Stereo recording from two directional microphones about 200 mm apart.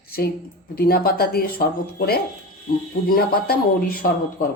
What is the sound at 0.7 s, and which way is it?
Speech, 50° left (ahead or behind).